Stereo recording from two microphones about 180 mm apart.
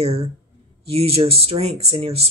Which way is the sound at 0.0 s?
35° right (ahead or behind).